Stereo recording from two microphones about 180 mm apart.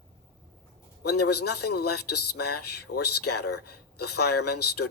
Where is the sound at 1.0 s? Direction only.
65° left (ahead or behind).